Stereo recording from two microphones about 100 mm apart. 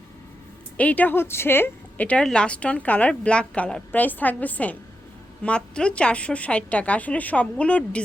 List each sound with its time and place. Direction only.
0.8 s a woman's voice: 15° left (ahead or behind)